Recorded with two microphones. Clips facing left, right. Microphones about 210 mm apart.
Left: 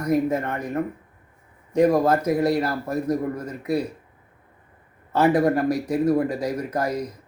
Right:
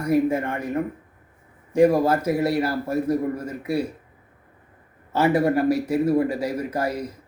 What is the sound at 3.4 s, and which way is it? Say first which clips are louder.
Speech: even; 10° right (ahead or behind).